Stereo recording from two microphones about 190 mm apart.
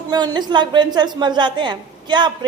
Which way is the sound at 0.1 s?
20° right (ahead or behind).